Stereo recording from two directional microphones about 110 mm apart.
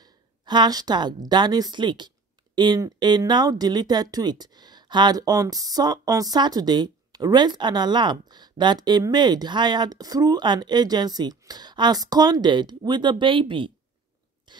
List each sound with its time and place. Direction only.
0.0 s a woman's voice: 40° right (ahead or behind)
14.5 s mechanisms: 45° right (ahead or behind)